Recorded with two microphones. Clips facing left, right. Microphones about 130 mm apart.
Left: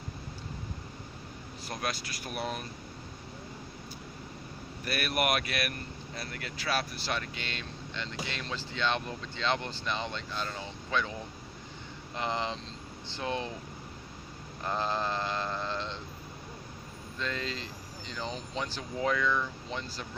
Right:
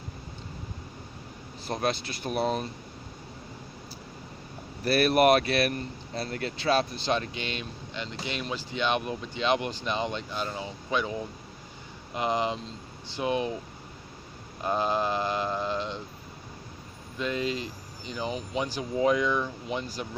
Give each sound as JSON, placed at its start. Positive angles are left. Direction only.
{"t": 1.6, "sound": "speech", "side_deg": -25}
{"t": 4.9, "sound": "speech", "side_deg": -35}
{"t": 12.1, "sound": "speech", "side_deg": -15}
{"t": 14.6, "sound": "speech", "side_deg": -15}
{"t": 17.2, "sound": "speech", "side_deg": -15}